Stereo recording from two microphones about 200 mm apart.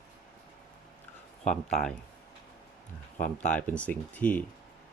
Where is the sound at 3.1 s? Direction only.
35° left (ahead or behind).